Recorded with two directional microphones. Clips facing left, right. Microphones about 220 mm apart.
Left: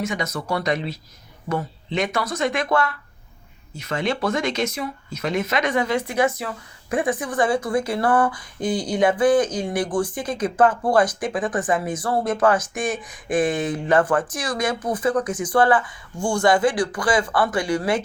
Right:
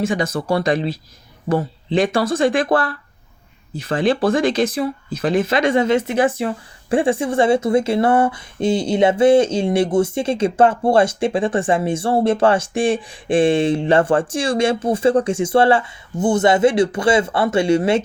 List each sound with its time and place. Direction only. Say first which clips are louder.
0.0 s speech: right 6 dB; 30° right (ahead or behind)